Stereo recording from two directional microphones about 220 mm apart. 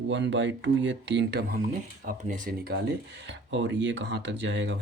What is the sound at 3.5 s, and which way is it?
Speech, 55° right (ahead or behind).